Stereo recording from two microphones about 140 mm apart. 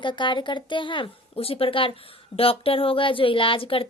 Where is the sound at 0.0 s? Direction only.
35° left (ahead or behind).